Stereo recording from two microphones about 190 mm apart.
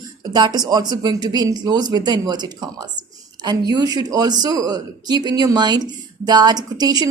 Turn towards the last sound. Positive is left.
turn(degrees=-20)  # may be behind; listen again after turning